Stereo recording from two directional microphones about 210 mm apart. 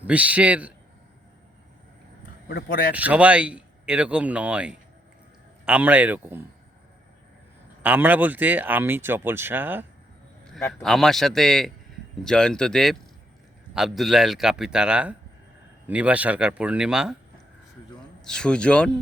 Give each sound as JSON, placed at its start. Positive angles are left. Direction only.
{"t": 0.0, "sound": "speech", "side_deg": -5}
{"t": 2.5, "sound": "speech", "side_deg": 50}
{"t": 2.9, "sound": "speech", "side_deg": -5}
{"t": 7.8, "sound": "speech", "side_deg": -10}
{"t": 10.7, "sound": "speech", "side_deg": 5}
{"t": 18.3, "sound": "speech", "side_deg": 5}